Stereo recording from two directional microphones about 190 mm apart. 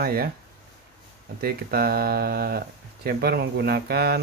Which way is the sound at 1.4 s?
55° right (ahead or behind).